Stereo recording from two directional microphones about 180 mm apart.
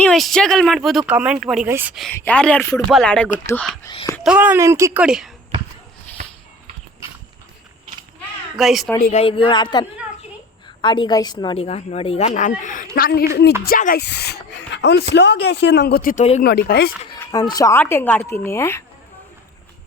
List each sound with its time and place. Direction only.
0.0 s speech: centre (ahead or behind)
2.1 s speech: 10° left (ahead or behind)
4.2 s speech: 5° right (ahead or behind)
5.0 s speech: centre (ahead or behind)
8.5 s speech: centre (ahead or behind)
9.1 s a woman's voice: 30° left (ahead or behind); by 14.0 s 50° left (ahead or behind)
14.0 s speech: 65° left (ahead or behind)
17.2 s speech: 20° left (ahead or behind)